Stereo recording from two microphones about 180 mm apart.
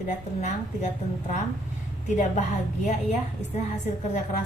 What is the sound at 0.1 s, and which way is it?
Speech, 40° left (ahead or behind).